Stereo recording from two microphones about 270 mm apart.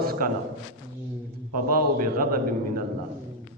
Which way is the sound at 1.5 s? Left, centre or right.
Right.